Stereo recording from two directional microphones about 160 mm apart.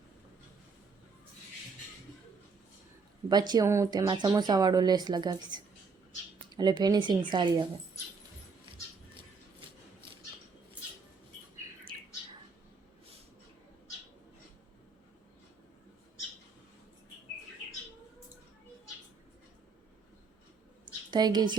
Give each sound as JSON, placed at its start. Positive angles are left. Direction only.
{"t": 3.2, "sound": "speech", "side_deg": -25}
{"t": 21.1, "sound": "a woman's voice", "side_deg": -25}